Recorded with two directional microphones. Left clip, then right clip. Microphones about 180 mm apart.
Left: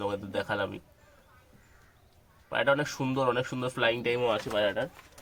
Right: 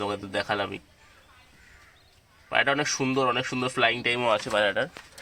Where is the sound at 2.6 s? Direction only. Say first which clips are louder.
Right 3 dB; 25° right (ahead or behind).